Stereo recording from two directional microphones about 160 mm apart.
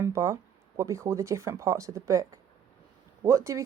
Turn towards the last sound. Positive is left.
turn(degrees=-20)  # may be behind; listen again after turning